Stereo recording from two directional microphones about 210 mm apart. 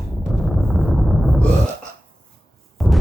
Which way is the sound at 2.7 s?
Centre (ahead or behind).